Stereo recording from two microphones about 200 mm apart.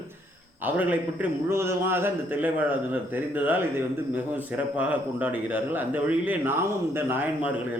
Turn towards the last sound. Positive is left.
turn(degrees=-10)  # may be behind; listen again after turning